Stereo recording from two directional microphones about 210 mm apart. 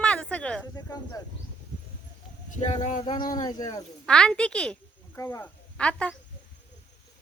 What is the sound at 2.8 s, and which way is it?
Speech, 35° left (ahead or behind).